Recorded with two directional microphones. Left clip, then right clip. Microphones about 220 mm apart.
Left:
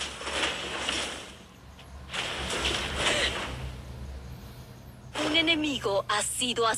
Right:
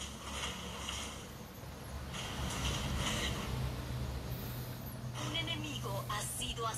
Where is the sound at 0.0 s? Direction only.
40° left (ahead or behind).